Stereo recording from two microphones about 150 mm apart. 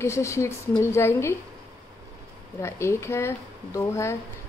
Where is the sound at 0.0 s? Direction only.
20° left (ahead or behind).